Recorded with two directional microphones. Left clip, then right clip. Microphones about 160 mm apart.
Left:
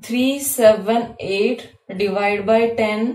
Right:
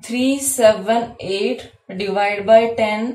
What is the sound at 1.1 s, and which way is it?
A woman's voice, 20° left (ahead or behind).